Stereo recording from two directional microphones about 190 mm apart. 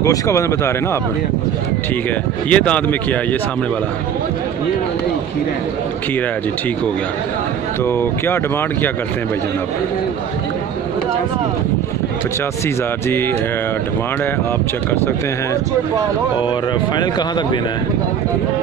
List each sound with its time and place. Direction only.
0.0 s speech: 15° left (ahead or behind)
2.5 s speech: 5° left (ahead or behind)
7.8 s speech: 10° left (ahead or behind)